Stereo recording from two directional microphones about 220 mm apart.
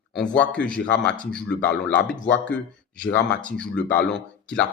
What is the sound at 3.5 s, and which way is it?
Speech, 5° left (ahead or behind).